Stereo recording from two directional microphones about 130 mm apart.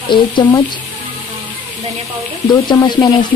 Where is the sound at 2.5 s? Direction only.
35° left (ahead or behind).